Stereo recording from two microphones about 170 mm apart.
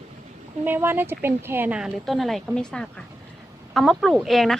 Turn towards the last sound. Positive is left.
turn(degrees=0)  # may be behind; listen again after turning